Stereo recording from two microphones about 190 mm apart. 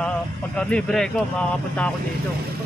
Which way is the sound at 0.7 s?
5° left (ahead or behind).